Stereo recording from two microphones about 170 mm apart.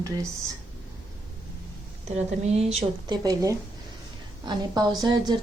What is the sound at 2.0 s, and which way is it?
Speech, 40° right (ahead or behind).